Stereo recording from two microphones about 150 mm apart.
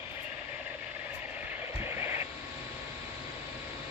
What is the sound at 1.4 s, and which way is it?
Vehicle, 15° right (ahead or behind).